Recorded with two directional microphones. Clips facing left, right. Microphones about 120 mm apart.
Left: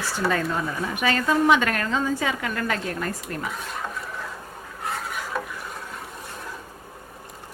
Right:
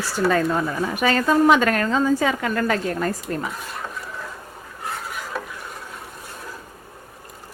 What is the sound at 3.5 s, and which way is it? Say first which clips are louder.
Dishes: even; centre (ahead or behind).